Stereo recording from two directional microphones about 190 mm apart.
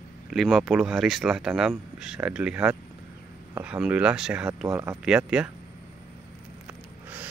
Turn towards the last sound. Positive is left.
turn(degrees=-5)  # may be behind; listen again after turning